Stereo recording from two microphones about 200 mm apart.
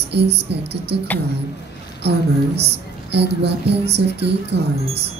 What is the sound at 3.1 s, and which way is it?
A woman's voice, 55° right (ahead or behind).